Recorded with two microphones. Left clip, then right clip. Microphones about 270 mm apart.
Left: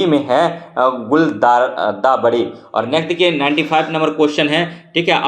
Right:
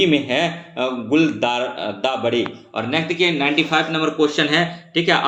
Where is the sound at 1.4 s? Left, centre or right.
Centre.